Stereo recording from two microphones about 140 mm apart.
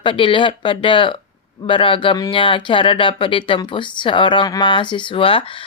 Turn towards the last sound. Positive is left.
turn(degrees=40)  # may be behind; listen again after turning